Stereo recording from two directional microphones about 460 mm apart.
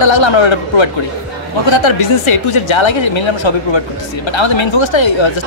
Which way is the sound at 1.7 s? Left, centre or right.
Left.